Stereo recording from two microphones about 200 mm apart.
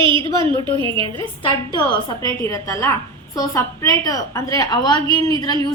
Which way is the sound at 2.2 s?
15° left (ahead or behind).